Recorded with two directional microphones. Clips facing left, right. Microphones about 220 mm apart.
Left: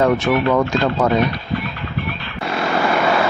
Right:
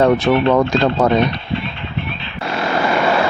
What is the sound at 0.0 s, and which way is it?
Speech, 30° right (ahead or behind).